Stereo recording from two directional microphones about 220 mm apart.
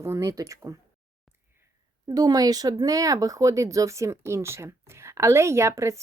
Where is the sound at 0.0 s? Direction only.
10° right (ahead or behind).